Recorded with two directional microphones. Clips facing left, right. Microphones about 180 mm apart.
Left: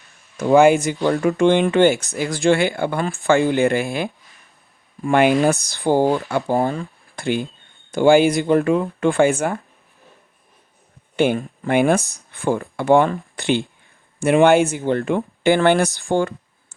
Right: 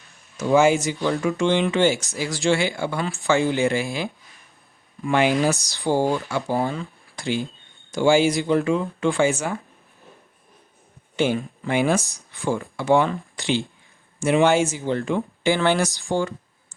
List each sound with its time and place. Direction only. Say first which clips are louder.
0.5 s speech: left 4 dB; 55° left (ahead or behind)
11.2 s speech: left 4 dB; 55° left (ahead or behind)